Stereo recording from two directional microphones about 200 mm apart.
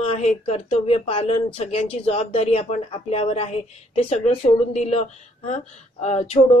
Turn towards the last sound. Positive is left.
turn(degrees=30)  # may be behind; listen again after turning